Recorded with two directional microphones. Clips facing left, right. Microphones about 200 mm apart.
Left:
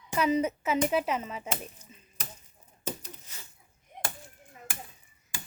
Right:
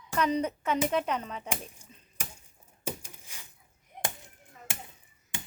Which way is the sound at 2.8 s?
10° right (ahead or behind).